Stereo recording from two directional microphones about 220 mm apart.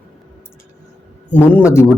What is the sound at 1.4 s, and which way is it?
Speech, 10° left (ahead or behind).